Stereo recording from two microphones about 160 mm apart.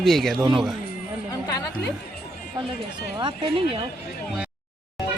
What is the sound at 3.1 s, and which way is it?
Speech, 30° right (ahead or behind).